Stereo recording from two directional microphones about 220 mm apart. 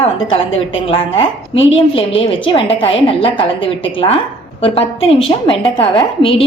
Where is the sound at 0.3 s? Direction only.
25° left (ahead or behind).